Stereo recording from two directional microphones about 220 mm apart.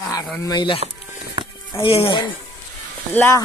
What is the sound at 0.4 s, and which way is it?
Speech, 20° left (ahead or behind).